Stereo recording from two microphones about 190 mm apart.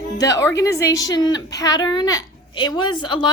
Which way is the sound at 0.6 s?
15° left (ahead or behind).